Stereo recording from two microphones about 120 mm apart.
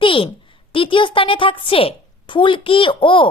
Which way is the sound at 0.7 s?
45° left (ahead or behind).